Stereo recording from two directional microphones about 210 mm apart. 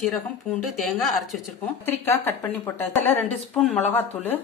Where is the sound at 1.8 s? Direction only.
10° left (ahead or behind).